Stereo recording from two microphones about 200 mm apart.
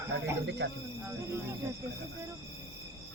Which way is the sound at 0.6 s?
55° right (ahead or behind).